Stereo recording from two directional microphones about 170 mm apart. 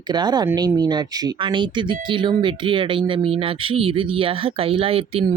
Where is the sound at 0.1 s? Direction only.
25° right (ahead or behind).